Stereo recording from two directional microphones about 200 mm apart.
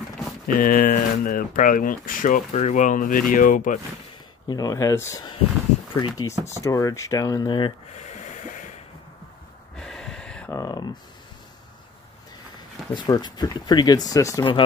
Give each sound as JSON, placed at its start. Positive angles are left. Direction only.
{"t": 0.5, "sound": "speech", "side_deg": 45}
{"t": 4.5, "sound": "speech", "side_deg": 20}
{"t": 7.9, "sound": "snort", "side_deg": 35}
{"t": 9.8, "sound": "a sound", "side_deg": 5}
{"t": 10.5, "sound": "speech", "side_deg": 20}
{"t": 12.9, "sound": "speech", "side_deg": 20}